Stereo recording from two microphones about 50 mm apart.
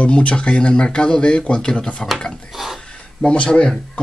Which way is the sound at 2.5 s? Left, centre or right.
Centre.